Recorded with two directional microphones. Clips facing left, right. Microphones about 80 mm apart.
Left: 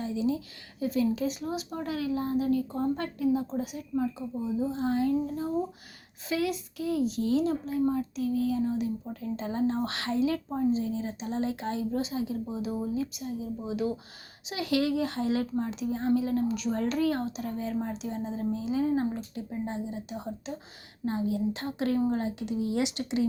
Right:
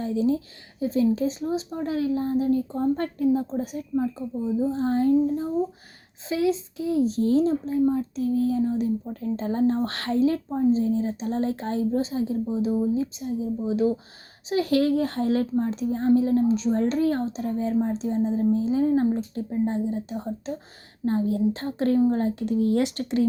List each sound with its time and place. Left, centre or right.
0.0 s a woman's voice: right
3.0 s a woman's voice: right
6.2 s a woman's voice: right